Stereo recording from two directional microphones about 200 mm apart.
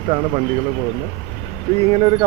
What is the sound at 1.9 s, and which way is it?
Speech, 25° right (ahead or behind).